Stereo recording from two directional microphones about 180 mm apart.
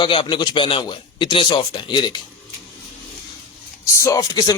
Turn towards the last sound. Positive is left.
turn(degrees=20)  # may be behind; listen again after turning